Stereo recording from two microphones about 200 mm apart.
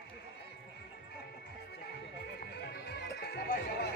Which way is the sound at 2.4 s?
55° left (ahead or behind).